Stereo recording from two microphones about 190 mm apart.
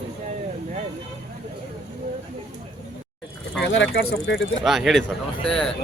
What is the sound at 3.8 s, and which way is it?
Speech, 75° left (ahead or behind).